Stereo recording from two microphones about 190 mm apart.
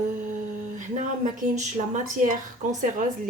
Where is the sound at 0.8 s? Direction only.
40° right (ahead or behind).